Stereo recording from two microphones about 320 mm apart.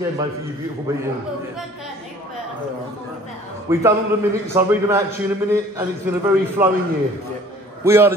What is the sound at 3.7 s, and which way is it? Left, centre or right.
A man's voice, centre.